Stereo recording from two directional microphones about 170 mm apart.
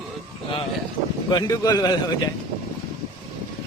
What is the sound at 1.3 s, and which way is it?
Speech, 20° left (ahead or behind).